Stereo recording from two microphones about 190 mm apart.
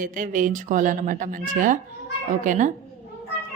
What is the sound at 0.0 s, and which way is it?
A woman's voice, 45° right (ahead or behind).